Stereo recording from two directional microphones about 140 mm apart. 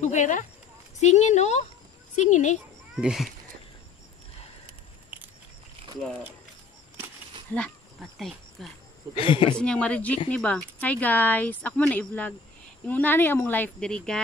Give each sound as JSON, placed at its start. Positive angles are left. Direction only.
{"t": 0.0, "sound": "speech", "side_deg": 60}
{"t": 3.0, "sound": "speech", "side_deg": -5}
{"t": 7.5, "sound": "a sound", "side_deg": 5}
{"t": 9.1, "sound": "speech", "side_deg": 40}
{"t": 9.6, "sound": "speech", "side_deg": 10}